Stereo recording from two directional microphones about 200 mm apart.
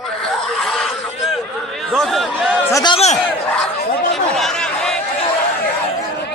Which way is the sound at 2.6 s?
20° left (ahead or behind).